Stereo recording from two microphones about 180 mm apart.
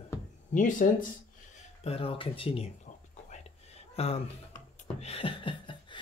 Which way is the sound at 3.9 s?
35° left (ahead or behind).